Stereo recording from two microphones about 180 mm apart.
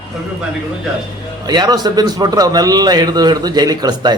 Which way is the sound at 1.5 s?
25° right (ahead or behind).